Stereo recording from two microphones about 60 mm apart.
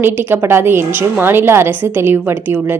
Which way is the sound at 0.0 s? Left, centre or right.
Right.